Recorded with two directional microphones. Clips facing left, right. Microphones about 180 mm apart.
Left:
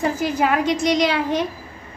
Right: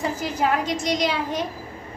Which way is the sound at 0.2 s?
65° left (ahead or behind).